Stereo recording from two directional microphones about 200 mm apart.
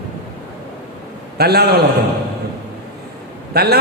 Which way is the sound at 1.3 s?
55° right (ahead or behind).